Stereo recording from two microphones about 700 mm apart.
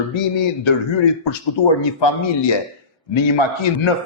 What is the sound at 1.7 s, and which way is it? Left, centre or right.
A man's voice, left.